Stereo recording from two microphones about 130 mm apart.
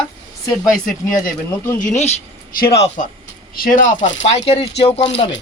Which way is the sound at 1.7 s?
60° left (ahead or behind).